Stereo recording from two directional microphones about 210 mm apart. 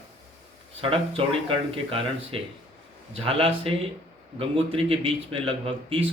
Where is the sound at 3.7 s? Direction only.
25° right (ahead or behind).